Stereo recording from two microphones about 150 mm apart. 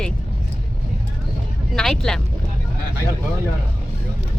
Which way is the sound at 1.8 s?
5° left (ahead or behind).